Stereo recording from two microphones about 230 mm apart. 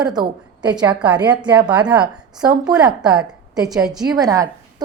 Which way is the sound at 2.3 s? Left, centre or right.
Centre.